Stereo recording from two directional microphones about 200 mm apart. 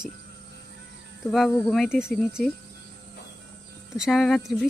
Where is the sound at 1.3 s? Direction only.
Centre (ahead or behind).